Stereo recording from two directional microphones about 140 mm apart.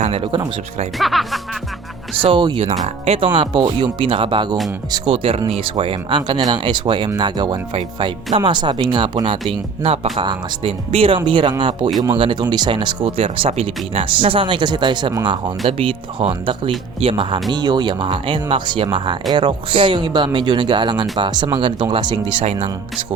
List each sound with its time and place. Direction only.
0.1 s speech: 40° right (ahead or behind)
0.9 s speech: centre (ahead or behind)
2.2 s speech: 35° right (ahead or behind)
2.8 s speech: 45° right (ahead or behind)
3.3 s speech: 35° right (ahead or behind)
9.5 s speech: 45° right (ahead or behind)